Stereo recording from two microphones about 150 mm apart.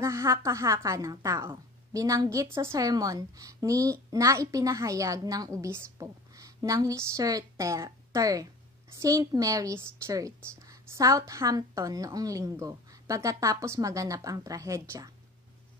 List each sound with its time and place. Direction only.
0.0 s a woman's voice: 20° right (ahead or behind)